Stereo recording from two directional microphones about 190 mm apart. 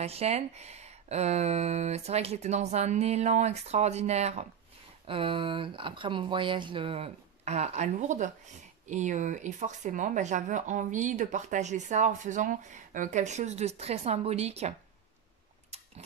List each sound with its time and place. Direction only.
0.0 s speech: 35° right (ahead or behind)